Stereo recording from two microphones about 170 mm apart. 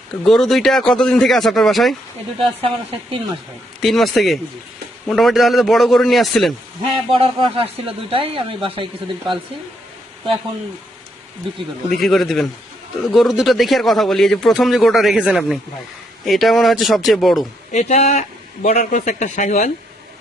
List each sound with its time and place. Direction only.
0.3 s speech: centre (ahead or behind)
2.4 s speech: 30° right (ahead or behind)
3.8 s speech: centre (ahead or behind)
7.1 s speech: 35° right (ahead or behind)
11.9 s speech: centre (ahead or behind)
17.7 s speech: 40° left (ahead or behind)